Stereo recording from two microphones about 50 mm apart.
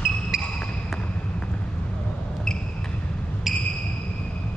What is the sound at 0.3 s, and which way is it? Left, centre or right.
Music, centre.